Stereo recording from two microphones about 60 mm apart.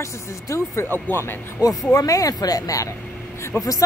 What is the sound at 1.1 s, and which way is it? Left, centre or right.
Speech, left.